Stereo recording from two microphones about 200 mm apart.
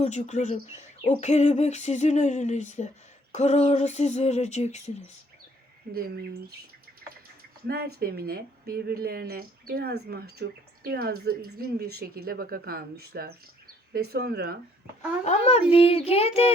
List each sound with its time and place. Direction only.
0.0 s bird: 35° left (ahead or behind)
5.9 s speech: 50° right (ahead or behind)
7.7 s speech: 50° right (ahead or behind)
15.2 s bird: 35° left (ahead or behind)
15.7 s child singing: 30° left (ahead or behind)